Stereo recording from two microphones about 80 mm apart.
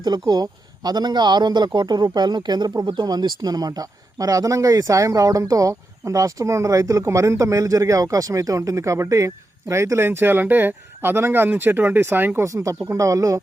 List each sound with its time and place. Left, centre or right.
0.0 s a man's voice: right
2.0 s speech: right
12.5 s speech: right